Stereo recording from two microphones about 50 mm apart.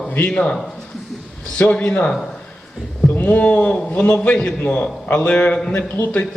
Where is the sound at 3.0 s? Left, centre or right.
Left.